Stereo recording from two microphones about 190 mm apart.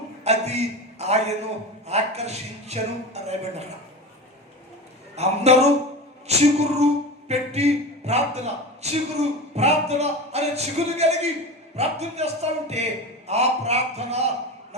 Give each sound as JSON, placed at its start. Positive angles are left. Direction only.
{"t": 0.3, "sound": "a man's voice", "side_deg": -35}
{"t": 5.1, "sound": "a man's voice", "side_deg": -35}